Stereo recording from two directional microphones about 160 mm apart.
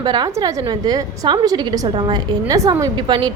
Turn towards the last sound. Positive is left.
turn(degrees=-25)  # may be behind; listen again after turning